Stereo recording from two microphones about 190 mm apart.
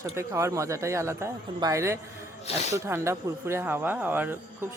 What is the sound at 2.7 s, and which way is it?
Speech, 15° right (ahead or behind).